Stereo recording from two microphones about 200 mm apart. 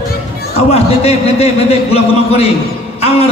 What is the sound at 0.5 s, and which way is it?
A man's voice, 30° left (ahead or behind).